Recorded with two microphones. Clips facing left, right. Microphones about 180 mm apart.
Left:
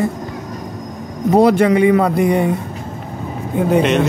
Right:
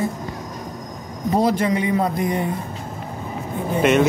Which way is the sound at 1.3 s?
70° left (ahead or behind).